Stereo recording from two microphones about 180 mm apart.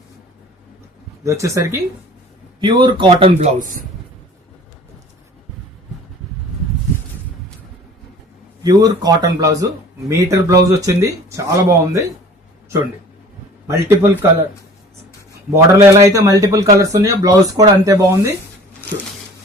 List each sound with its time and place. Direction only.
1.2 s a man's voice: 15° right (ahead or behind)
3.6 s speech: 50° right (ahead or behind)
8.6 s a man's voice: 20° right (ahead or behind)
13.7 s a man's voice: 15° right (ahead or behind)
15.5 s a man's voice: 15° right (ahead or behind)